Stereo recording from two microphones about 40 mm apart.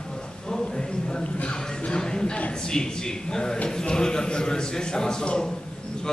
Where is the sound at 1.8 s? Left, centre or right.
Centre.